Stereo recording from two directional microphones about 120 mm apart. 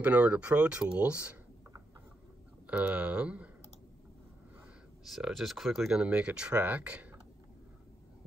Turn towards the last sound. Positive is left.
turn(degrees=-10)  # may be behind; listen again after turning